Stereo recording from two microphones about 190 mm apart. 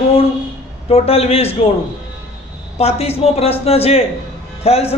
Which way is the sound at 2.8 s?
35° left (ahead or behind).